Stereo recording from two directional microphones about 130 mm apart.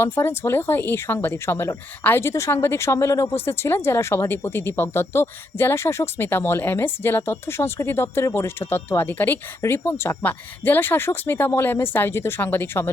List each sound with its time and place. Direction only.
0.0 s speech: 20° left (ahead or behind)